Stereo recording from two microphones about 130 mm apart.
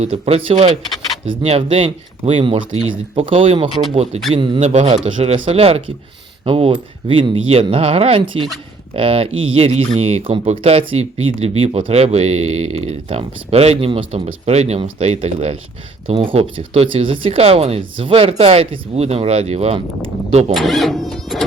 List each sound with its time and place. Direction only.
0.0 s speech: 50° right (ahead or behind)
1.4 s speech: 50° right (ahead or behind)
4.4 s a man's voice: 40° right (ahead or behind)
4.6 s speech: 60° right (ahead or behind)
16.0 s speech: 45° right (ahead or behind)
20.5 s speech: centre (ahead or behind)